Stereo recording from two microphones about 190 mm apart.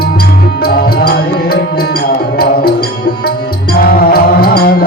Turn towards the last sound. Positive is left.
turn(degrees=55)  # may be behind; listen again after turning